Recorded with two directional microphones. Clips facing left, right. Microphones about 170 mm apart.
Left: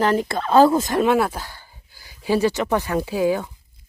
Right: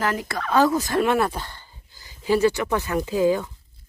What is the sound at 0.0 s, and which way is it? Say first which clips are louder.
Speech: left 6 dB; 25° left (ahead or behind).